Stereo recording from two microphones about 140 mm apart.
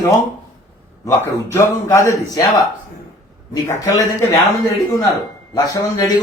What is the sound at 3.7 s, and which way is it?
A man's voice, 25° left (ahead or behind).